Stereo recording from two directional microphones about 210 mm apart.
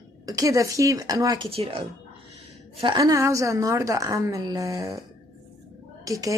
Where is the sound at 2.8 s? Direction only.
20° right (ahead or behind).